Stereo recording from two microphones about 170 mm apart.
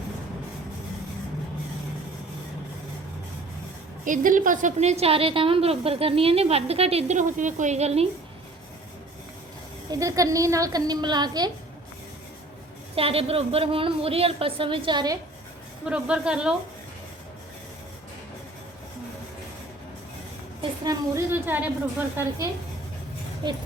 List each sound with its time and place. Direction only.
4.0 s a woman's voice: 50° right (ahead or behind)
9.9 s a woman's voice: 20° right (ahead or behind)
13.0 s a woman's voice: 35° right (ahead or behind)
15.8 s a woman's voice: 5° right (ahead or behind)
20.6 s a woman's voice: 25° right (ahead or behind)
23.4 s a woman's voice: 30° right (ahead or behind)